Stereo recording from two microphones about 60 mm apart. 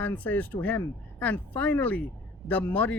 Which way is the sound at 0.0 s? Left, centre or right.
Left.